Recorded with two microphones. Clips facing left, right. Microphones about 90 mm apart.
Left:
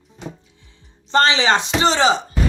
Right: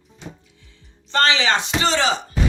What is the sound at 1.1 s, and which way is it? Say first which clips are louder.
Speech: left 3 dB; 20° left (ahead or behind).